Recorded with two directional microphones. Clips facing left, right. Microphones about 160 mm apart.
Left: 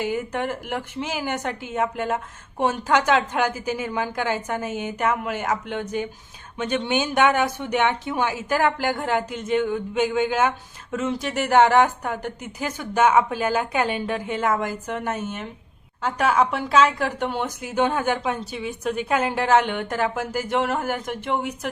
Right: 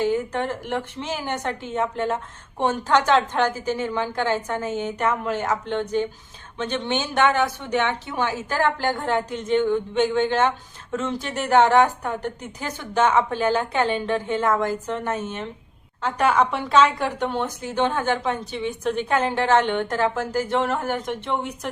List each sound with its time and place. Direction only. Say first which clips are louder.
0.0 s speech: right 3 dB; 10° left (ahead or behind)